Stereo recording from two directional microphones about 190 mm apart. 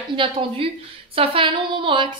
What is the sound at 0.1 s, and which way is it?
A woman's voice, 25° right (ahead or behind).